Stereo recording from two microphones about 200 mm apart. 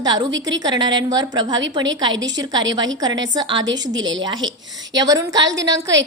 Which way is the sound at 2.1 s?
65° right (ahead or behind).